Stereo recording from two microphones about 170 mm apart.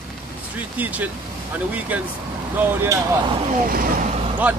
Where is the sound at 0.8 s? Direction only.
10° right (ahead or behind).